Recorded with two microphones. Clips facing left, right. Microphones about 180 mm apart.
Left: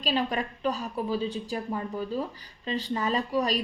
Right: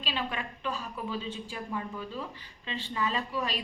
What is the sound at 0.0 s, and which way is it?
A woman's voice, 40° left (ahead or behind).